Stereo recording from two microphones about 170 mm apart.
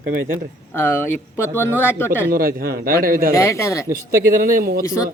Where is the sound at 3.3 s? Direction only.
15° left (ahead or behind).